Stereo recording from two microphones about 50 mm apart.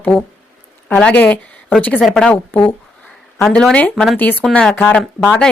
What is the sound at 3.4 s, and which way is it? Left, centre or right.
Speech, centre.